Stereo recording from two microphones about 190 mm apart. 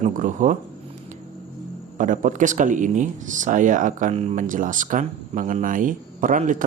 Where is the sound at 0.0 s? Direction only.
40° right (ahead or behind).